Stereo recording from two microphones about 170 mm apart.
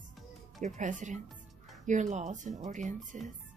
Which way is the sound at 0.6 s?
45° right (ahead or behind).